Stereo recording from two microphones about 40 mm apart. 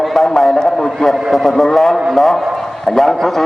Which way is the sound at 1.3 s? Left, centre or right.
Centre.